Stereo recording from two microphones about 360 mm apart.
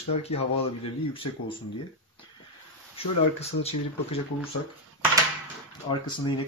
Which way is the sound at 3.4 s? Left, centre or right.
Centre.